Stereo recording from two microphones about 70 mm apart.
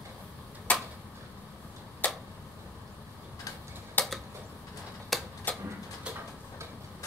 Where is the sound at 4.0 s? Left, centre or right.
Left.